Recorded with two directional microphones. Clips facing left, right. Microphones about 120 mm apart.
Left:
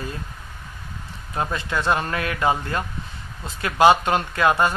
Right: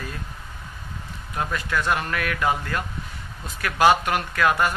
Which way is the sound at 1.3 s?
25° left (ahead or behind).